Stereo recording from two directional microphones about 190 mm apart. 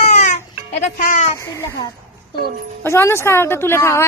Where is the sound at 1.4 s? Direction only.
15° left (ahead or behind).